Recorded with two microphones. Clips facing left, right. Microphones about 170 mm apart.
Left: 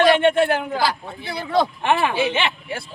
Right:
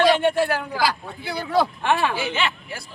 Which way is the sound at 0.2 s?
20° left (ahead or behind).